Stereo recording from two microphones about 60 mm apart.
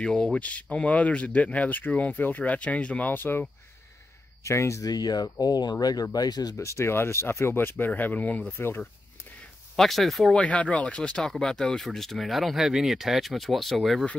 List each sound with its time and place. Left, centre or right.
0.0 s speech: centre
3.1 s speech: left
4.4 s speech: left
4.8 s speech: left
6.5 s speech: left
7.7 s speech: left
8.5 s speech: left
9.8 s speech: centre
10.3 s speech: left; by 14.0 s centre